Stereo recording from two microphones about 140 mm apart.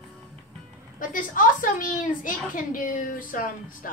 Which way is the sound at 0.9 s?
70° left (ahead or behind).